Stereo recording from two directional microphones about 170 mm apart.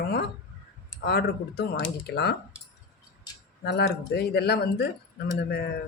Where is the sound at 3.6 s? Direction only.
75° left (ahead or behind).